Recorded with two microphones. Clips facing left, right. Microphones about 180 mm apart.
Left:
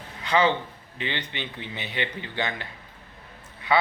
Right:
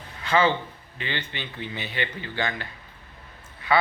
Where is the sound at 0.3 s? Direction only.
20° left (ahead or behind).